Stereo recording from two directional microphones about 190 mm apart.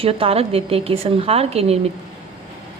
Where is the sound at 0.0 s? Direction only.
30° right (ahead or behind).